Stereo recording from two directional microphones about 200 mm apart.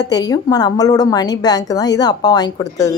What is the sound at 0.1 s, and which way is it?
A woman's voice, 20° left (ahead or behind).